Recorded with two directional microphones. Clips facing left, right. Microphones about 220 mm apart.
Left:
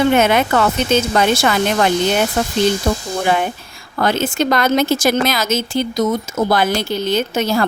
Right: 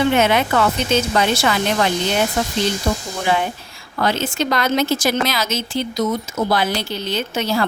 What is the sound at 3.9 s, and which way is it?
Speech, 50° left (ahead or behind).